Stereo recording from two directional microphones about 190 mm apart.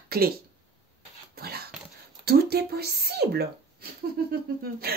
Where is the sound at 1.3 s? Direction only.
55° right (ahead or behind).